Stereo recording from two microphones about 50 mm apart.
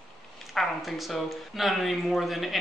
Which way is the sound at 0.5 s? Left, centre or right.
Centre.